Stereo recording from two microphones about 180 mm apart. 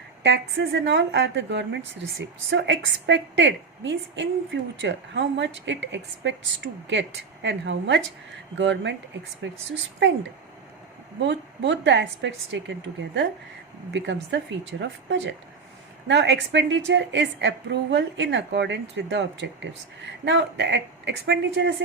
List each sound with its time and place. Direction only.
0.2 s a woman's voice: 75° right (ahead or behind)
10.0 s a woman's voice: 90° right
11.2 s a woman's voice: 90° right
13.9 s a woman's voice: 80° right